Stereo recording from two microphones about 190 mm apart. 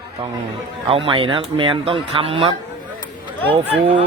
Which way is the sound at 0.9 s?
30° right (ahead or behind).